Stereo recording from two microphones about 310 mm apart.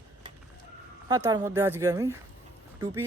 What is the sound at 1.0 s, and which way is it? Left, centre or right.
A man's voice, centre.